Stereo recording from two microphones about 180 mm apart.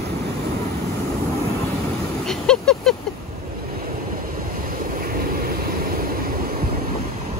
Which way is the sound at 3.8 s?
55° right (ahead or behind).